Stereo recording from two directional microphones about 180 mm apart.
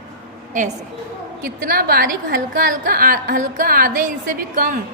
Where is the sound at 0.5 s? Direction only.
45° right (ahead or behind).